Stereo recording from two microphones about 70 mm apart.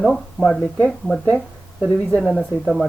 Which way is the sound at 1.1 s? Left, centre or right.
Right.